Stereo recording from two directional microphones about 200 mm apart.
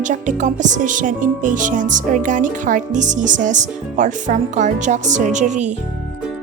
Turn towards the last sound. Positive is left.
turn(degrees=-35)  # may be behind; listen again after turning